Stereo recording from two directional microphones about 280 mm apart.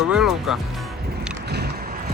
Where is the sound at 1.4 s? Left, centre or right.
Right.